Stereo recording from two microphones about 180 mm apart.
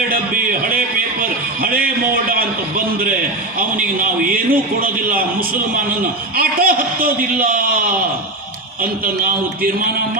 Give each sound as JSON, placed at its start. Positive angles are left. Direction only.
{"t": 1.2, "sound": "a sound", "side_deg": -55}
{"t": 3.6, "sound": "a man's voice", "side_deg": -50}
{"t": 6.3, "sound": "a man's voice", "side_deg": -55}